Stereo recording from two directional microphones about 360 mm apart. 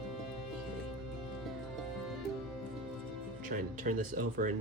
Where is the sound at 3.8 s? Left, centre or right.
Right.